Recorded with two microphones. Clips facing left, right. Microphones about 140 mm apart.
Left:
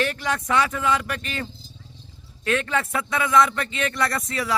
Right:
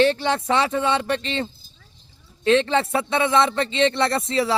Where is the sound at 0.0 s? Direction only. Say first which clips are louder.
Right 6 dB; 30° right (ahead or behind).